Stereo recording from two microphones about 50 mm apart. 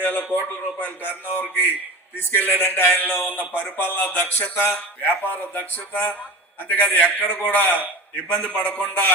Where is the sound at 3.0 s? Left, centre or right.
Left.